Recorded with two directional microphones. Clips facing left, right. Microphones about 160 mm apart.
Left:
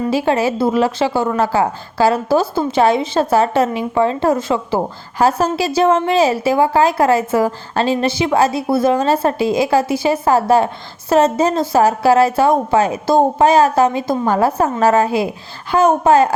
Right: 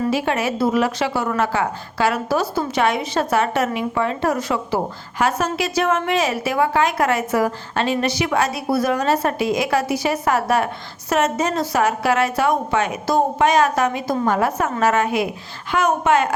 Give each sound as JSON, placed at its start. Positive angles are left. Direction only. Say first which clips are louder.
{"t": 0.0, "sound": "a woman's voice", "louder": "left 4 dB", "side_deg": 30}